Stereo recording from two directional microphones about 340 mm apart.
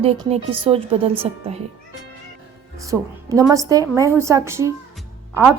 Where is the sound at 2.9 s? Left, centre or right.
Centre.